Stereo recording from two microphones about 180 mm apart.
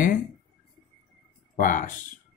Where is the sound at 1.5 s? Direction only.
45° left (ahead or behind).